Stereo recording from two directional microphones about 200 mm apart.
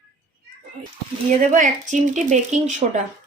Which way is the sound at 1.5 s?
40° right (ahead or behind).